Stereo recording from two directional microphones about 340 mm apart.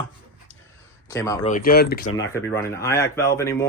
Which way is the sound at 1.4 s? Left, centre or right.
Left.